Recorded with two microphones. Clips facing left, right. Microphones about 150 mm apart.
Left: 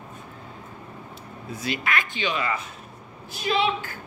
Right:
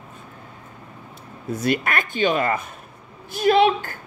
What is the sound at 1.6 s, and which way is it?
Speech, 50° right (ahead or behind).